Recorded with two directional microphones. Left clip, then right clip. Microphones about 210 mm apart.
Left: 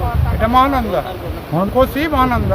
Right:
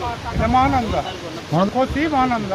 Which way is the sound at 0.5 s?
15° left (ahead or behind).